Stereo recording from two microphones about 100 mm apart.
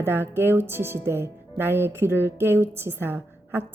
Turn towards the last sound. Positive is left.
turn(degrees=-20)  # may be behind; listen again after turning